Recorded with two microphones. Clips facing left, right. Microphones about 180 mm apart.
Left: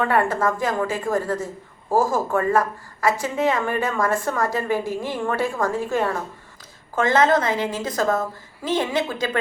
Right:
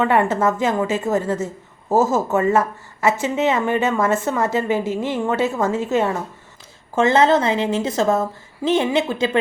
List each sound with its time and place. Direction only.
0.0 s a woman's voice: 20° right (ahead or behind)